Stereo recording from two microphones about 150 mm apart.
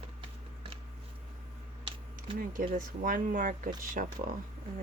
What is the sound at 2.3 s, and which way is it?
Speech, 65° right (ahead or behind).